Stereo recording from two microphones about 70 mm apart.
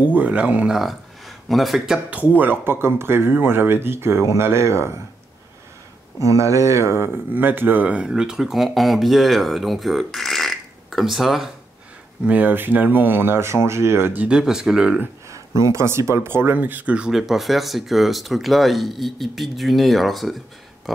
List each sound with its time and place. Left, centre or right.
0.0 s speech: right
0.7 s speech: centre
2.0 s speech: right
6.2 s speech: right; by 11.5 s centre
12.3 s speech: right
14.1 s speech: centre
15.6 s speech: right
16.5 s speech: right; by 20.3 s centre